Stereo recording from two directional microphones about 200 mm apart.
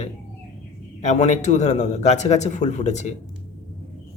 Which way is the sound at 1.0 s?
35° left (ahead or behind).